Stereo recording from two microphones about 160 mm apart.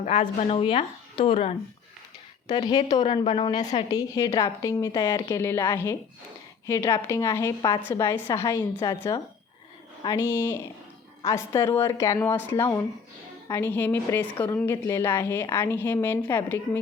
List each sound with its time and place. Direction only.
0.0 s a woman's voice: 35° left (ahead or behind)
3.6 s a woman's voice: 45° left (ahead or behind)
3.8 s a woman's voice: 25° left (ahead or behind)